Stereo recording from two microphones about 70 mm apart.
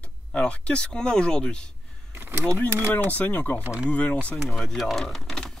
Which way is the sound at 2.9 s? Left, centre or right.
Left.